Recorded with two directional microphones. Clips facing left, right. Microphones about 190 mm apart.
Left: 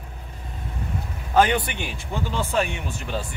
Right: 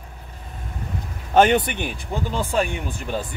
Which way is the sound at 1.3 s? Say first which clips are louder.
Right 3 dB; 25° right (ahead or behind).